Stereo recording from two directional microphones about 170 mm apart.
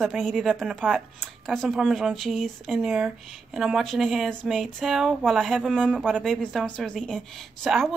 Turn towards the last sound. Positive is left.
turn(degrees=0)  # may be behind; listen again after turning